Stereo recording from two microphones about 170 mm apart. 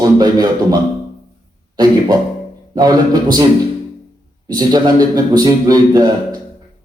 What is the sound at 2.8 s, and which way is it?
Speech, 25° right (ahead or behind).